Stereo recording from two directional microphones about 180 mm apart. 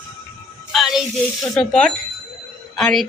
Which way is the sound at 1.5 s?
5° left (ahead or behind).